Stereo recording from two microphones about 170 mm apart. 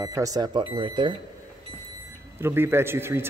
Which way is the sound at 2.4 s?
15° right (ahead or behind).